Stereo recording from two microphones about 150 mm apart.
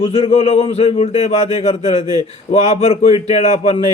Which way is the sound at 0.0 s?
40° left (ahead or behind).